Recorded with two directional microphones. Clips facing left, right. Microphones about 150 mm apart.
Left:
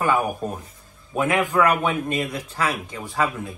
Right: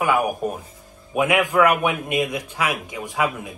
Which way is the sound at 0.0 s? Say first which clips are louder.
Right 1 dB; 10° right (ahead or behind).